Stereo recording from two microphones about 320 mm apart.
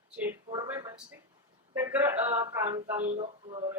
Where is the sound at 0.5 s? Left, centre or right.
Centre.